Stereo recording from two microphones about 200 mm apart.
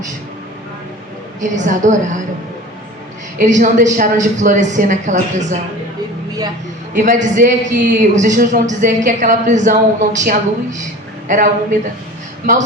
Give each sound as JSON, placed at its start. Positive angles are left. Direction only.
{"t": 1.4, "sound": "a woman's voice", "side_deg": -40}
{"t": 3.4, "sound": "a woman's voice", "side_deg": -40}
{"t": 6.9, "sound": "a woman's voice", "side_deg": -40}